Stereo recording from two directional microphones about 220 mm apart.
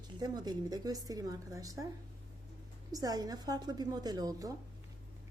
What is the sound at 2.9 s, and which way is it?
A woman's voice, 15° right (ahead or behind).